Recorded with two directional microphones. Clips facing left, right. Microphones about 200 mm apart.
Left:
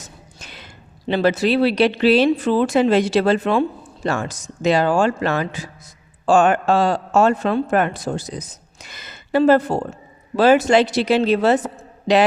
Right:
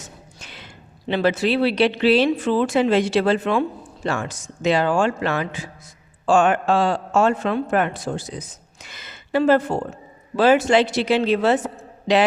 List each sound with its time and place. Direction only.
0.0 s a man's voice: 40° left (ahead or behind)